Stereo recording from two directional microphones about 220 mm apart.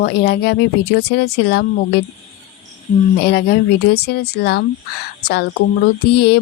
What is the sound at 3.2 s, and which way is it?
Speech, 50° left (ahead or behind).